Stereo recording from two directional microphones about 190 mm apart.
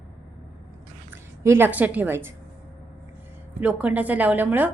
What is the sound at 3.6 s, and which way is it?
A woman's voice, 5° right (ahead or behind).